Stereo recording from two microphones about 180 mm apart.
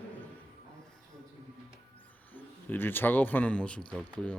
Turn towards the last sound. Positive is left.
turn(degrees=5)  # may be behind; listen again after turning